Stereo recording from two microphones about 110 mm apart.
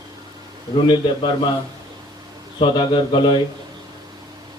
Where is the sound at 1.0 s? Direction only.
50° left (ahead or behind).